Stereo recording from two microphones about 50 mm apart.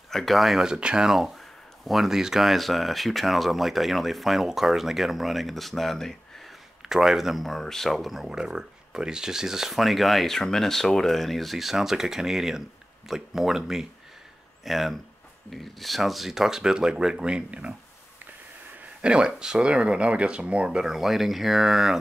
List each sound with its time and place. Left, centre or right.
0.1 s speech: centre
0.6 s speech: centre
1.1 s speech: centre
6.8 s speech: centre
7.4 s speech: centre
8.2 s speech: centre
18.9 s speech: centre
20.8 s speech: centre